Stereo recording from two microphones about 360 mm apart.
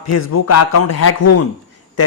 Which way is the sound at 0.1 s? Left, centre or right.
Left.